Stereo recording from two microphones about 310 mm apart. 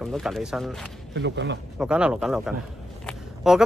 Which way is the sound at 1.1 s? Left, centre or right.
Right.